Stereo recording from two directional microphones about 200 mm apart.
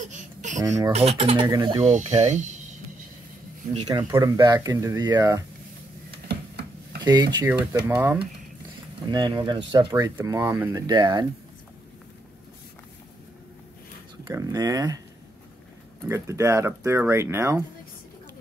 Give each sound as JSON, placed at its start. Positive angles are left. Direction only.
{"t": 0.1, "sound": "a sound", "side_deg": -40}
{"t": 0.6, "sound": "speech", "side_deg": -15}
{"t": 0.9, "sound": "speech", "side_deg": -30}
{"t": 1.9, "sound": "speech", "side_deg": -35}
{"t": 3.8, "sound": "speech", "side_deg": -20}
{"t": 6.2, "sound": "a sound", "side_deg": -55}
{"t": 7.0, "sound": "speech", "side_deg": -20}
{"t": 7.8, "sound": "speech", "side_deg": -10}
{"t": 9.1, "sound": "speech", "side_deg": -20}
{"t": 14.2, "sound": "speech", "side_deg": -15}
{"t": 16.1, "sound": "speech", "side_deg": -15}